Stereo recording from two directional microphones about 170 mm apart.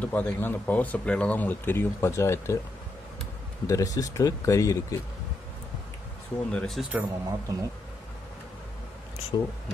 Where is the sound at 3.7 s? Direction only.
20° left (ahead or behind).